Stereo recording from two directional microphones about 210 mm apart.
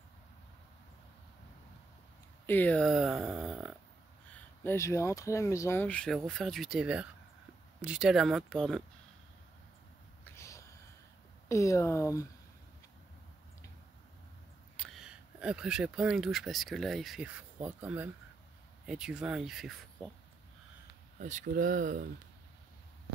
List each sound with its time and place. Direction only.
2.4 s speech: 10° left (ahead or behind)
4.6 s speech: 15° left (ahead or behind)
10.2 s a sound: 15° left (ahead or behind)
11.4 s speech: 15° left (ahead or behind)
14.8 s speech: centre (ahead or behind)
21.2 s speech: 35° right (ahead or behind)